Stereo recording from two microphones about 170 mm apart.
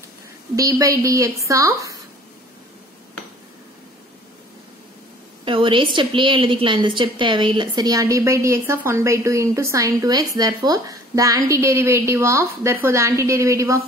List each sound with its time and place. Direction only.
0.6 s a woman's voice: 20° right (ahead or behind)
5.4 s a woman's voice: 30° right (ahead or behind)